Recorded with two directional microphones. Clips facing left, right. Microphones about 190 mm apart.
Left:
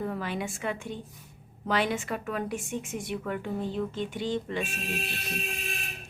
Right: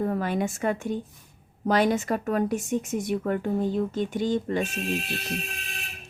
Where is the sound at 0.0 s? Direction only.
45° right (ahead or behind).